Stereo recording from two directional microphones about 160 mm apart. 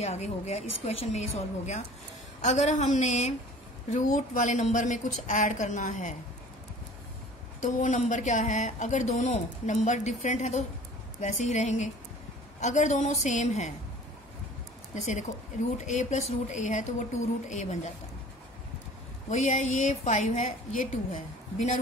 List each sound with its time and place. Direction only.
0.0 s speech: 45° left (ahead or behind)
2.4 s speech: 50° left (ahead or behind)
7.6 s speech: 50° left (ahead or behind)
15.0 s speech: 45° left (ahead or behind)
19.2 s speech: 45° left (ahead or behind)